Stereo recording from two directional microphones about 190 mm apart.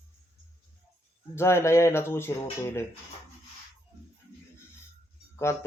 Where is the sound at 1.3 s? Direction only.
15° left (ahead or behind).